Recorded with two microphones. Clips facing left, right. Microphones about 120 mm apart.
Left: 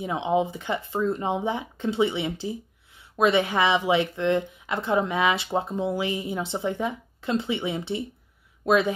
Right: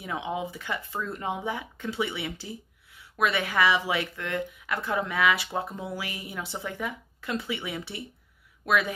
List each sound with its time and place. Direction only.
0.0 s speech: 25° left (ahead or behind)